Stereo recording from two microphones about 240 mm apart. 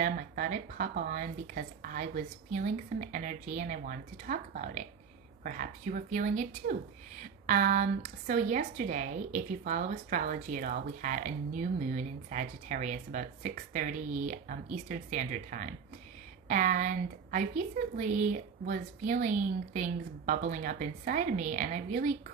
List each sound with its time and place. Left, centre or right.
0.0 s a woman's voice: right